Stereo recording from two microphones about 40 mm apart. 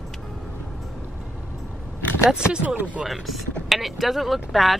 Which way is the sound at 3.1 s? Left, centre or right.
Centre.